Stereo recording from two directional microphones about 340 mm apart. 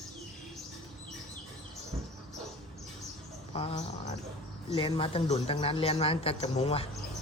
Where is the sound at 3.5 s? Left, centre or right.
Centre.